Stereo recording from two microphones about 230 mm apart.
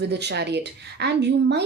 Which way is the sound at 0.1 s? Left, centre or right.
Right.